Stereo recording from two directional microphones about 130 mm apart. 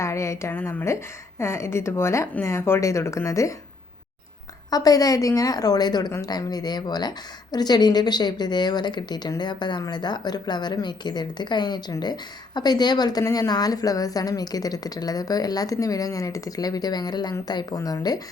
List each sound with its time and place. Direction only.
0.0 s a woman's voice: 20° left (ahead or behind)
4.7 s a woman's voice: 30° left (ahead or behind)